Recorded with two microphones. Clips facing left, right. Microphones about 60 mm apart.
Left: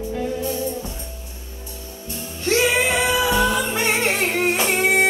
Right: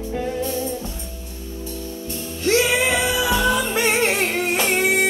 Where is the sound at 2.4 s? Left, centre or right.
Left.